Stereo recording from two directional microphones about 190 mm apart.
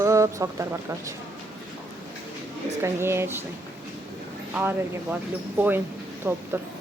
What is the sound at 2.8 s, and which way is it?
Speech, 15° right (ahead or behind).